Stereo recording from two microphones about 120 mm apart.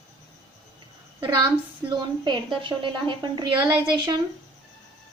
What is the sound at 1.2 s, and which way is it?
A woman's voice, 35° right (ahead or behind).